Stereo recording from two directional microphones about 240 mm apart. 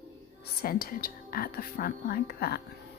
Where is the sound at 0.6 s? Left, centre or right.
Left.